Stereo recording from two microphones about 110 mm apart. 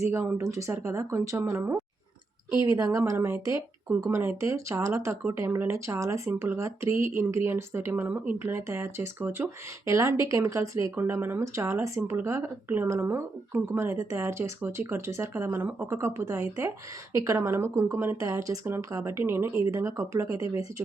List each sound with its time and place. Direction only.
0.1 s speech: 25° right (ahead or behind)